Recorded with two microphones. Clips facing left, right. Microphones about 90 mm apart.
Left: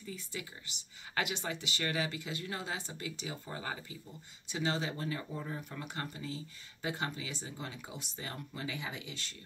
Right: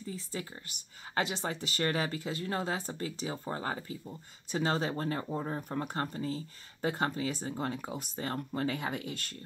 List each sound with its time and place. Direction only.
0.0 s speech: 35° right (ahead or behind)